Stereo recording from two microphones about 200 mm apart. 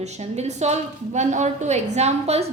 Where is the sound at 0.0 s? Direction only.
35° right (ahead or behind).